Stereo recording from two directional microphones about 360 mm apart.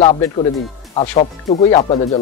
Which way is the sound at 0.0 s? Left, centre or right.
Centre.